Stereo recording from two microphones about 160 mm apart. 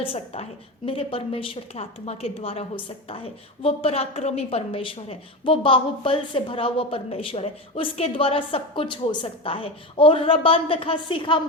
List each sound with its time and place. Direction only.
0.0 s a woman's voice: 35° left (ahead or behind)